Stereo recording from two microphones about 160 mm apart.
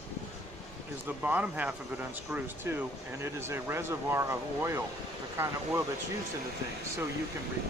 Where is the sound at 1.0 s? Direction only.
10° right (ahead or behind).